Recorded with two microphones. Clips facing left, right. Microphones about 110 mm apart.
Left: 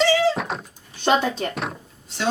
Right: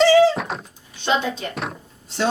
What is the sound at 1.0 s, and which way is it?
Speech, 50° left (ahead or behind).